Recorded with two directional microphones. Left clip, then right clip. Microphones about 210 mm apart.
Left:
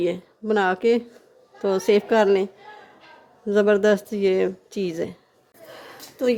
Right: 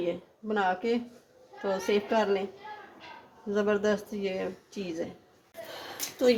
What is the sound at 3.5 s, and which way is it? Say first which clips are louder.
Speech: left 9 dB; 55° left (ahead or behind).